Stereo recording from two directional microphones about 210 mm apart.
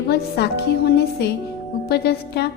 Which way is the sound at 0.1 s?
50° left (ahead or behind).